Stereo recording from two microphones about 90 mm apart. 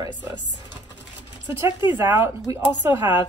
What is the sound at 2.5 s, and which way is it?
Speech, 40° right (ahead or behind).